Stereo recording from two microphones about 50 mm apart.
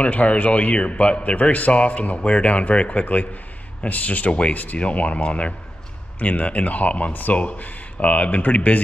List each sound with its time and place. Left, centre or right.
0.0 s a man's voice: left